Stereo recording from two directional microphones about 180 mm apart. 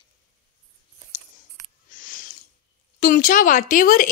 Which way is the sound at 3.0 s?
50° left (ahead or behind).